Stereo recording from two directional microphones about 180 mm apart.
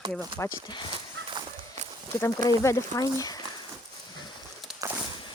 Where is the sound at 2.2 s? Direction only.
15° left (ahead or behind).